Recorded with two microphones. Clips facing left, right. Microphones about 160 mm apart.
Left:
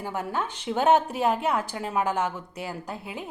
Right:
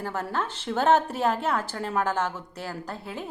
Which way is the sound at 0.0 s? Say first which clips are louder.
Even; 15° left (ahead or behind).